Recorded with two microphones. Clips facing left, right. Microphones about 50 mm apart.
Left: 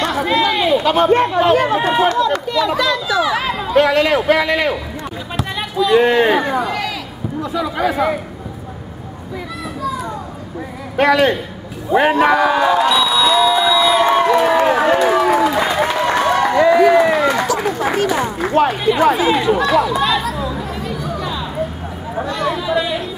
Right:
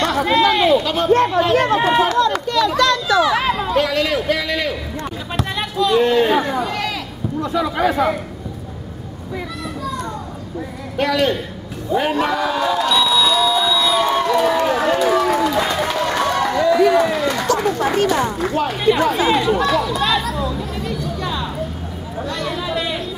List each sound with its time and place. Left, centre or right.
0.0 s a sound: centre
0.8 s speech: centre
3.7 s a man's voice: left
5.0 s basketball bounce: centre
5.9 s a man's voice: left
6.3 s a man's voice: centre
7.9 s a man's voice: centre
9.8 s children playing: centre
11.0 s a man's voice: left
13.0 s crowd: centre
16.5 s a sound: left; by 18.5 s centre
18.8 s a man's voice: centre
19.1 s chatter: centre